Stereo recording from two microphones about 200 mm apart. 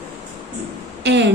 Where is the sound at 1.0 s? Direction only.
60° right (ahead or behind).